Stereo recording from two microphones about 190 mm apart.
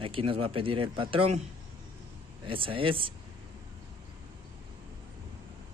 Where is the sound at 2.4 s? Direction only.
25° right (ahead or behind).